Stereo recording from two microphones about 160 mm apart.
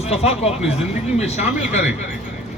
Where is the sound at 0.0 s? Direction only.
40° left (ahead or behind).